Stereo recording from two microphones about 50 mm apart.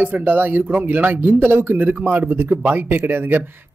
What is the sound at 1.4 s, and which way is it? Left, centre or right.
A man's voice, right.